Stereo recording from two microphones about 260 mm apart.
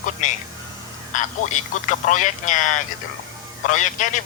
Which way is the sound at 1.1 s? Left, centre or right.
Left.